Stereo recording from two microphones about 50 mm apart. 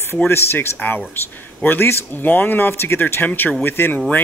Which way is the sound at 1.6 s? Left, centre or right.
Left.